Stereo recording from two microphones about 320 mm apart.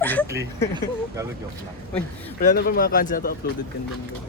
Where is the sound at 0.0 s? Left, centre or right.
Centre.